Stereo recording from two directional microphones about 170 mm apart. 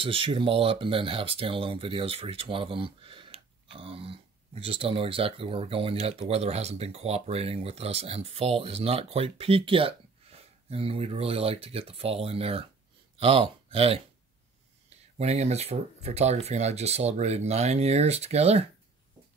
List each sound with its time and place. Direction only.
0.0 s speech: 30° right (ahead or behind)
15.1 s speech: 40° right (ahead or behind)